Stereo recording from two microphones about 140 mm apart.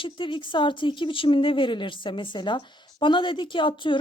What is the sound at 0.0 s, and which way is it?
A woman's voice, 35° left (ahead or behind).